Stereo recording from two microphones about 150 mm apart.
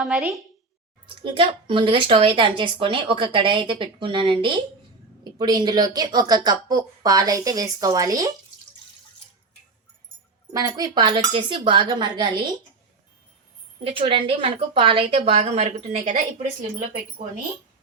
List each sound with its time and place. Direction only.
1.0 s speech: 35° right (ahead or behind)
10.5 s speech: 25° right (ahead or behind)
13.8 s speech: 40° right (ahead or behind)